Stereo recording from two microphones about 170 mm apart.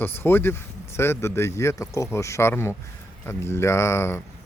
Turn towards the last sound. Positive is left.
turn(degrees=15)  # may be behind; listen again after turning